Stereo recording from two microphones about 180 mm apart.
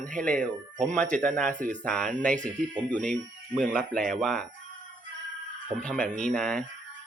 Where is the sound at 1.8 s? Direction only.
5° left (ahead or behind).